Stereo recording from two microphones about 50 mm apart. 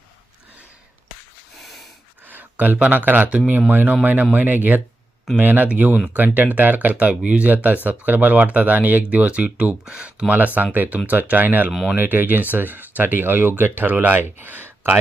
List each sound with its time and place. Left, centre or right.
2.3 s a sound: right
2.9 s speech: right
3.7 s speech: right
7.1 s speech: right
9.0 s speech: right
10.3 s speech: right
11.7 s speech: centre
11.9 s speech: right